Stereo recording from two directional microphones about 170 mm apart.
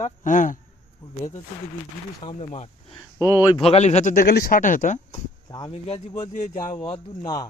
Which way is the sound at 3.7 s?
40° left (ahead or behind).